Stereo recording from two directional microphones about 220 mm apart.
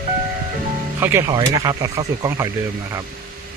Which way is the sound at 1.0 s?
10° right (ahead or behind).